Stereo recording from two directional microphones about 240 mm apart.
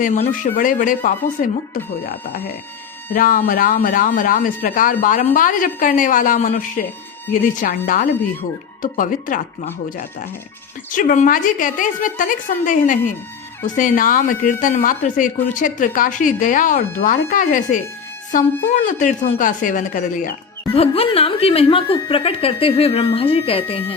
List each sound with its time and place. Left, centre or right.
0.0 s speech: left
10.9 s a woman's voice: left